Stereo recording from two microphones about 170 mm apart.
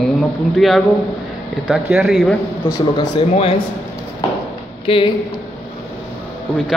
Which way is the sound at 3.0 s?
35° left (ahead or behind).